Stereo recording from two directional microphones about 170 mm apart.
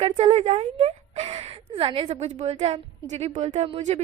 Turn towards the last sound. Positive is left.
turn(degrees=-35)  # may be behind; listen again after turning